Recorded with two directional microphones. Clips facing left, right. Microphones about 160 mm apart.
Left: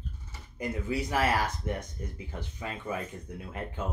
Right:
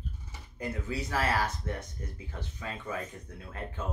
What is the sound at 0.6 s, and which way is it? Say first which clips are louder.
Speech: left 3 dB; 15° left (ahead or behind).